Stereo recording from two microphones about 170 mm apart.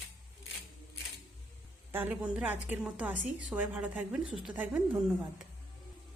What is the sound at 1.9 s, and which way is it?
Speech, 10° right (ahead or behind).